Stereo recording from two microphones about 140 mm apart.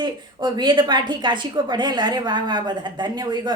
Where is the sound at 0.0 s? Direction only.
30° right (ahead or behind).